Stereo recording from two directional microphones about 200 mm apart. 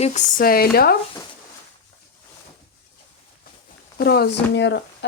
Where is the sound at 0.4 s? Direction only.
50° left (ahead or behind).